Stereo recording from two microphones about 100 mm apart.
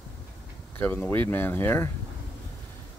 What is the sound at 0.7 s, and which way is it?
Speech, 15° left (ahead or behind).